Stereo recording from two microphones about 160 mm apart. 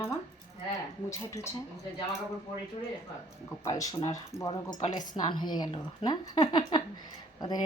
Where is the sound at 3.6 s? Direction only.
20° left (ahead or behind).